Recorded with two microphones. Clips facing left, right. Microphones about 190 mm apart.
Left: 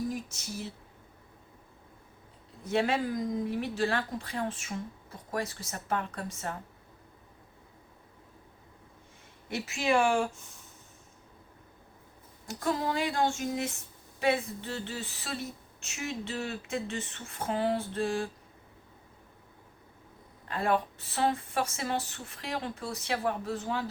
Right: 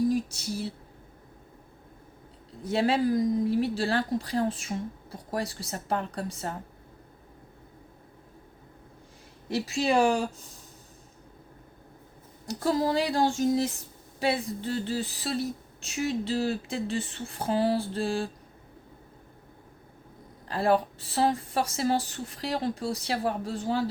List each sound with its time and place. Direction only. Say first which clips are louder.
0.1 s speech: right 9 dB; 35° right (ahead or behind)
2.6 s speech: right 4 dB; 35° right (ahead or behind)
9.5 s speech: right 3 dB; 35° right (ahead or behind)
12.5 s speech: right 5 dB; 35° right (ahead or behind)
20.5 s speech: right 4 dB; 35° right (ahead or behind)